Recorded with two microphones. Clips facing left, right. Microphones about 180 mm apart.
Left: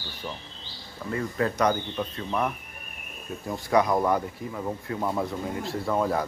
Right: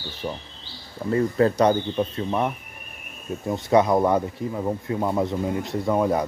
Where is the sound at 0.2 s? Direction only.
25° right (ahead or behind).